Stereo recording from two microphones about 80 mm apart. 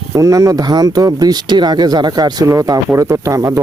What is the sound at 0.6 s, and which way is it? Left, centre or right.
Speech, right.